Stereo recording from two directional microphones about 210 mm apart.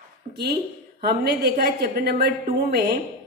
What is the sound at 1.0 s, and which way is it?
A woman's voice, 50° right (ahead or behind).